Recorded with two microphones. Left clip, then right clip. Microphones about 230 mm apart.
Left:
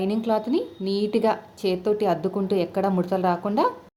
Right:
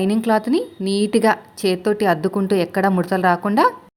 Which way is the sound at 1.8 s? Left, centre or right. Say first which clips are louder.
Right 4 dB; right.